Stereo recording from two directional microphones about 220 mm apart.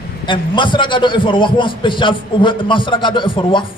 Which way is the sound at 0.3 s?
20° left (ahead or behind).